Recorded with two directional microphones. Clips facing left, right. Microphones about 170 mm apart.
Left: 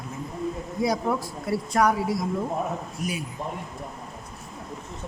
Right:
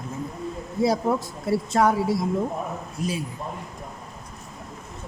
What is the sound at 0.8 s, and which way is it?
Speech, 25° right (ahead or behind).